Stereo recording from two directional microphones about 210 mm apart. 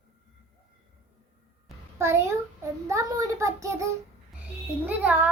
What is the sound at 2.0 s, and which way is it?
A child's voice, 10° right (ahead or behind).